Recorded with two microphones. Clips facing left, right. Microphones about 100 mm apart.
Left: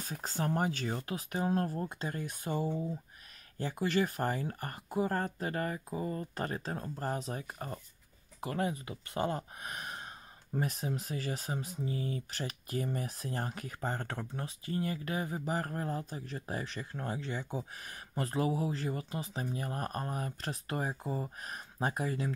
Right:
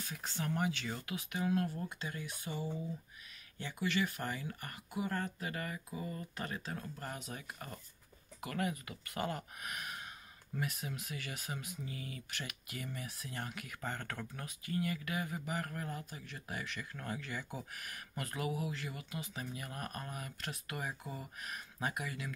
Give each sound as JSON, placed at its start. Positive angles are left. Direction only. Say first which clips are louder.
{"t": 0.0, "sound": "speech", "louder": "left 5 dB", "side_deg": 40}